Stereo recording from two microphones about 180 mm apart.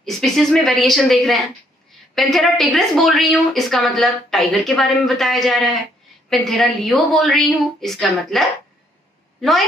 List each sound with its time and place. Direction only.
0.0 s a woman's voice: centre (ahead or behind)